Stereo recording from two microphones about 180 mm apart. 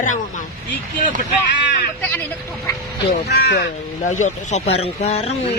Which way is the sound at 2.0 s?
10° left (ahead or behind).